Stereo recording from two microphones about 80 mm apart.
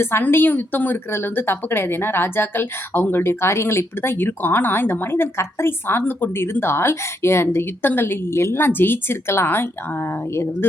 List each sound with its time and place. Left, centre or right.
0.0 s a woman's voice: left